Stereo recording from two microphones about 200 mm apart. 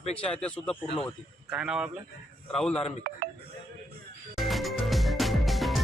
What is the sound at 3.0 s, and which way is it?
Speech, 45° right (ahead or behind).